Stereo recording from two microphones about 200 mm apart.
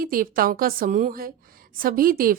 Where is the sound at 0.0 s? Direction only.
45° right (ahead or behind).